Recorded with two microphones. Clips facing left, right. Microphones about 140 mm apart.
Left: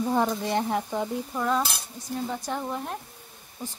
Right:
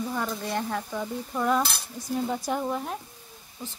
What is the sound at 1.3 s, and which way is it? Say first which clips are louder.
Cutlery: right 3 dB; 5° right (ahead or behind).